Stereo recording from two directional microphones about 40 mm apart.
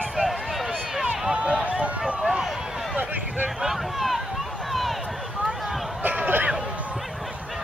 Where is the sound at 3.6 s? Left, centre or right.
Centre.